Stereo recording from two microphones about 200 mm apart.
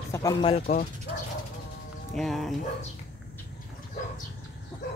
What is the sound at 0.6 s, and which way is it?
Speech, 35° left (ahead or behind).